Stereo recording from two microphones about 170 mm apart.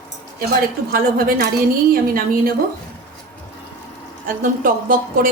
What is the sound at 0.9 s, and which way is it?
A woman's voice, 60° right (ahead or behind).